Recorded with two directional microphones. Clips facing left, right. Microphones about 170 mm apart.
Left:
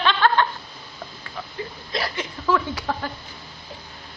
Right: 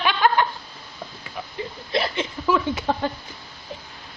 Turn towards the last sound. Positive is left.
turn(degrees=-25)  # may be behind; listen again after turning